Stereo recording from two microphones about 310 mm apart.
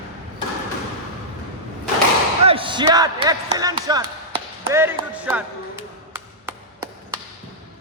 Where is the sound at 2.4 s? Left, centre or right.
Centre.